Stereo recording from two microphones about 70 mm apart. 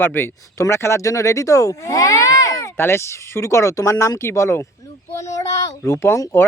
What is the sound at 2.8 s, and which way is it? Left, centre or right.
Speech, left.